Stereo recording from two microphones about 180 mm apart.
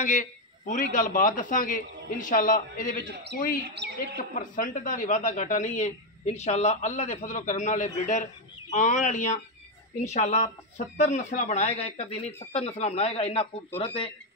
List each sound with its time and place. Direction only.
0.0 s speech: 45° left (ahead or behind)
3.7 s a woman's voice: 70° right (ahead or behind)
4.2 s speech: 50° left (ahead or behind); by 14.1 s 30° left (ahead or behind)